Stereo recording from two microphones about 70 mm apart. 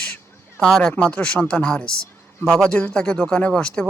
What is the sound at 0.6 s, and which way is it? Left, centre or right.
Speech, centre.